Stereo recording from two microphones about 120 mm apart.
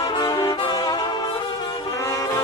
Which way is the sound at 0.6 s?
35° left (ahead or behind).